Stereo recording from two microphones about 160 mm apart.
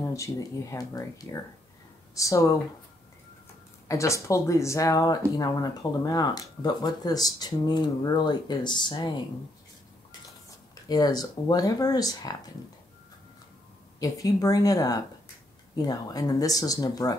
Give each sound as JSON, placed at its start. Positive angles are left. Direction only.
{"t": 0.1, "sound": "speech", "side_deg": 20}
{"t": 3.8, "sound": "speech", "side_deg": 20}
{"t": 10.7, "sound": "speech", "side_deg": 25}
{"t": 13.9, "sound": "speech", "side_deg": 20}